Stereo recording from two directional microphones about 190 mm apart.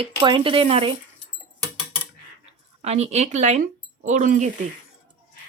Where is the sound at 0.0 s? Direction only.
30° right (ahead or behind).